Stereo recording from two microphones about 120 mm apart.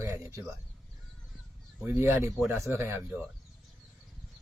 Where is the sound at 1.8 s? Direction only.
15° right (ahead or behind).